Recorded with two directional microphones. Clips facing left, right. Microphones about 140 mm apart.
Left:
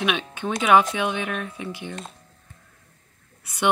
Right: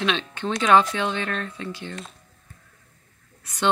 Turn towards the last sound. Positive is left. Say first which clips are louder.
# left 1 dB
turn(degrees=10)  # may be behind; listen again after turning